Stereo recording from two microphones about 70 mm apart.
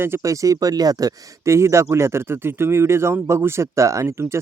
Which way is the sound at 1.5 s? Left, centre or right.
Right.